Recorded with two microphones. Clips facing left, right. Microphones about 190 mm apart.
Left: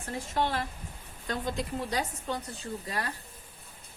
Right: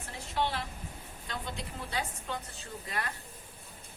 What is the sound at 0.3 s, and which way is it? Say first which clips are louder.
A woman's voice: left 2 dB; 45° left (ahead or behind).